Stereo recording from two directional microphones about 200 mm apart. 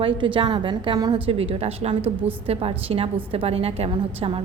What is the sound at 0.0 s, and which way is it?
A woman's voice, 25° right (ahead or behind).